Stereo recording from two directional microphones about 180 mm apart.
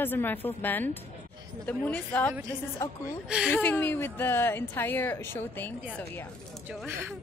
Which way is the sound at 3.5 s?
10° left (ahead or behind).